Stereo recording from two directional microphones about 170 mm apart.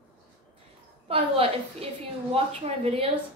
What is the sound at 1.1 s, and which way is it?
A woman's voice, 35° right (ahead or behind).